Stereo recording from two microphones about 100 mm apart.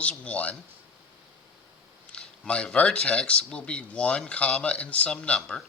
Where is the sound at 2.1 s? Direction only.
10° left (ahead or behind).